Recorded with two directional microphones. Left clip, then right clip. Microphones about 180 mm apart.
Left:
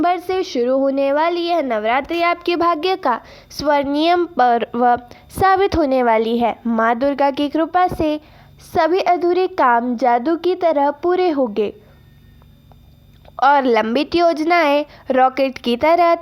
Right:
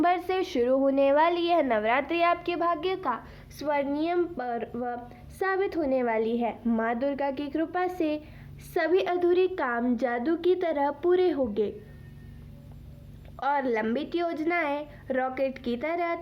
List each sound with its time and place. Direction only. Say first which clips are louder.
0.0 s a woman's voice: left 7 dB; 35° left (ahead or behind)
13.3 s a woman's voice: left 13 dB; 45° left (ahead or behind)